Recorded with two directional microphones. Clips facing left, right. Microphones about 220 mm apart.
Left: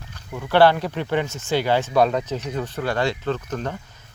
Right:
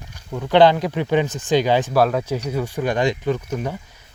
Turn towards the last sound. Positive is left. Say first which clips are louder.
# right 3 dB
turn(degrees=-10)  # may be behind; listen again after turning